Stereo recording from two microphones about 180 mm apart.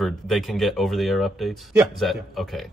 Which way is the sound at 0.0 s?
Centre (ahead or behind).